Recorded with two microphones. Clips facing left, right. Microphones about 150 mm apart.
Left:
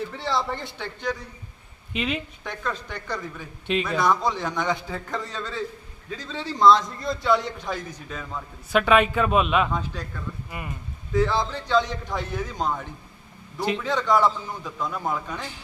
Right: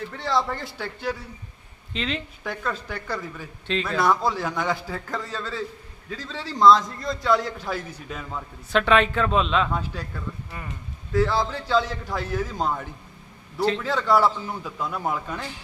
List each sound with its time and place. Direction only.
0.2 s a man's voice: centre (ahead or behind)
1.9 s a man's voice: 10° left (ahead or behind)
2.4 s a man's voice: 5° right (ahead or behind)
3.7 s a man's voice: 15° left (ahead or behind)
4.0 s a man's voice: 5° right (ahead or behind)
8.7 s a man's voice: 10° left (ahead or behind)
9.7 s a man's voice: 10° right (ahead or behind)
10.5 s a man's voice: 15° left (ahead or behind)
11.1 s a man's voice: 5° right (ahead or behind)
13.6 s a man's voice: 15° left (ahead or behind)
13.8 s a man's voice: 5° right (ahead or behind)